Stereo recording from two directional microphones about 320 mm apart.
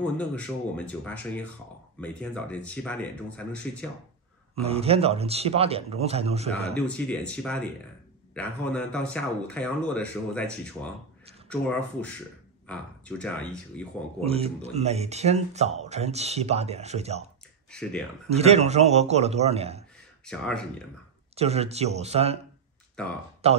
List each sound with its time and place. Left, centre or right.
0.0 s speech: centre
4.6 s speech: centre
7.1 s speech: centre
14.2 s speech: centre
17.6 s speech: centre
18.3 s speech: centre
20.2 s speech: centre
21.4 s speech: centre
23.4 s speech: centre